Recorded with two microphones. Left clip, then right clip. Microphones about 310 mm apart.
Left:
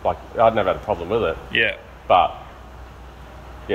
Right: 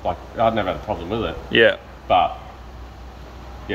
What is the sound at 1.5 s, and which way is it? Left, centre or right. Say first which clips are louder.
Speech: right 7 dB; centre.